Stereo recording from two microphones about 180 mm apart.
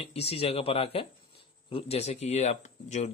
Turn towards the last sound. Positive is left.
turn(degrees=40)  # may be behind; listen again after turning